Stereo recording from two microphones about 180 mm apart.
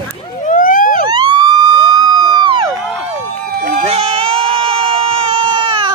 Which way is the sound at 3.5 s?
55° right (ahead or behind).